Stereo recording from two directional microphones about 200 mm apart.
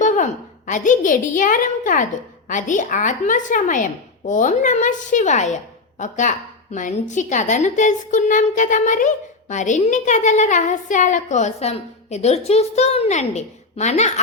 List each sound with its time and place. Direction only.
0.0 s a woman's voice: 40° left (ahead or behind)